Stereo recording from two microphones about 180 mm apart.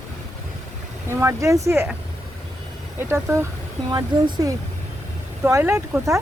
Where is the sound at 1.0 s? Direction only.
15° right (ahead or behind).